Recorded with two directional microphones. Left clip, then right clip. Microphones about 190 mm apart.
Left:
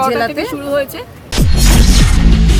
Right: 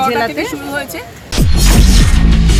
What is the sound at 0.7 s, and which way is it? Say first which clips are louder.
Speech: left 4 dB; 35° left (ahead or behind).